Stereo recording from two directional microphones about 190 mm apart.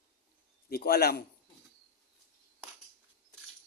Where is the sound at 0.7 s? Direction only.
55° left (ahead or behind).